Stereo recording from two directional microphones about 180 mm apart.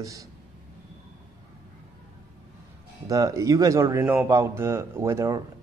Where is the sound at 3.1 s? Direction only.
20° right (ahead or behind).